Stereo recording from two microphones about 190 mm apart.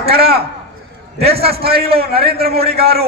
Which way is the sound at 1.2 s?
55° right (ahead or behind).